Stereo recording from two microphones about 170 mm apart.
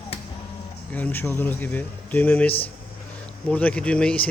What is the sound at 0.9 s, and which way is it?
Speech, 10° left (ahead or behind).